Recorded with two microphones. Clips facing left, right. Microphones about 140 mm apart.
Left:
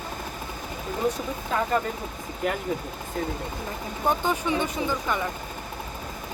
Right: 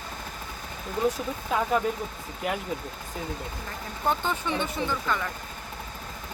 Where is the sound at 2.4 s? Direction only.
5° right (ahead or behind).